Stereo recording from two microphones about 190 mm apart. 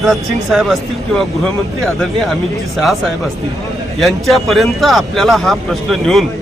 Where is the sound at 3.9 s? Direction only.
Centre (ahead or behind).